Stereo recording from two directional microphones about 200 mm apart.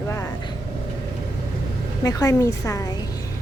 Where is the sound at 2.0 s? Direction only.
15° left (ahead or behind).